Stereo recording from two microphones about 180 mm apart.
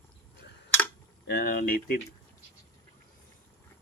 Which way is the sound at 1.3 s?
60° left (ahead or behind).